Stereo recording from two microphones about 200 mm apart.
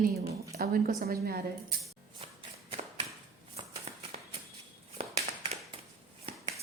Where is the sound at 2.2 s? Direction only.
25° right (ahead or behind).